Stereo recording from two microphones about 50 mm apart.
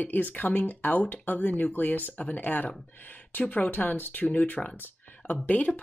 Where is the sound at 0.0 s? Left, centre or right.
Left.